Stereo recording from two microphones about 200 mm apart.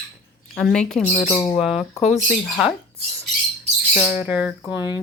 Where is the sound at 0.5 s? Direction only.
5° left (ahead or behind).